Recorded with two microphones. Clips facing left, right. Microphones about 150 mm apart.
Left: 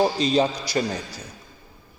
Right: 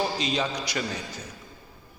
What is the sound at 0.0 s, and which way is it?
Speech, 35° left (ahead or behind).